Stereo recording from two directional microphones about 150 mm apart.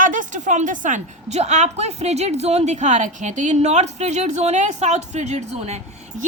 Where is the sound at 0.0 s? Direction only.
60° right (ahead or behind).